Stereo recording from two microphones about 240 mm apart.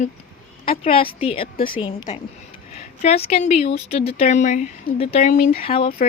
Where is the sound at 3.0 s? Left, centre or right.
Left.